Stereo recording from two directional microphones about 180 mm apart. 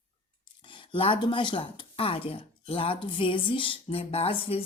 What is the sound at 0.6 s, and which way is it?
Speech, 25° left (ahead or behind).